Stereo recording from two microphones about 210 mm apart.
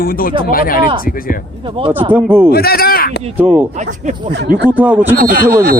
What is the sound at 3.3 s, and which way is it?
Speech, 10° right (ahead or behind).